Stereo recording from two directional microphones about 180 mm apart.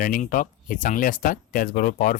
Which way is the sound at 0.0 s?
50° left (ahead or behind).